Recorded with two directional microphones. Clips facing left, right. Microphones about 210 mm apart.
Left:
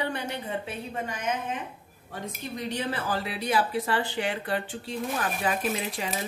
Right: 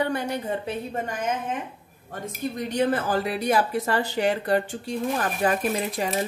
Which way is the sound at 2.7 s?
50° right (ahead or behind).